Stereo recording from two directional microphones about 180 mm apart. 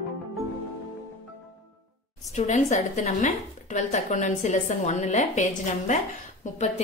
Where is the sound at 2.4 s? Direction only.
40° left (ahead or behind).